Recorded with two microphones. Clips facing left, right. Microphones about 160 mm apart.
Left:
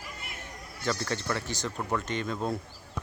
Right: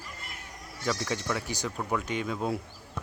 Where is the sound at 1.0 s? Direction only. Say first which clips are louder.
Even; 10° right (ahead or behind).